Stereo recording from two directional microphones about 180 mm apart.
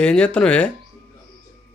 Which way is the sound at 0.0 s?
5° left (ahead or behind).